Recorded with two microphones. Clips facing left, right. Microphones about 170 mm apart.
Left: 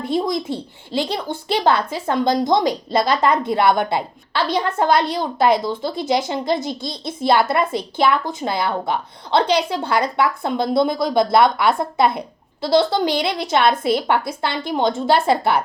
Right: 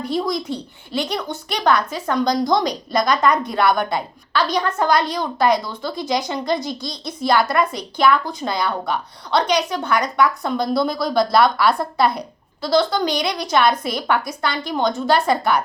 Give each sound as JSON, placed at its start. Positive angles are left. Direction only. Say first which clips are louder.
{"t": 0.0, "sound": "speech", "louder": "left 1 dB", "side_deg": 25}